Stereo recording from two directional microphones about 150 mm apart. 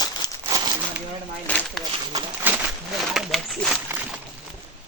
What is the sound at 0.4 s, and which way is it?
Crumpling, 25° right (ahead or behind).